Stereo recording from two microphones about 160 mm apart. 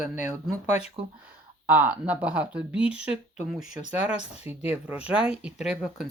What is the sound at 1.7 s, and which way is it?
Speech, 10° right (ahead or behind).